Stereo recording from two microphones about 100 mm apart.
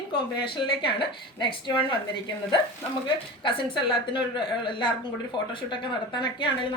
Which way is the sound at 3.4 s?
55° left (ahead or behind).